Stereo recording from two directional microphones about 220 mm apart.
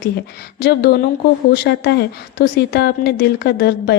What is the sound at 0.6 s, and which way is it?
Speech, 45° left (ahead or behind).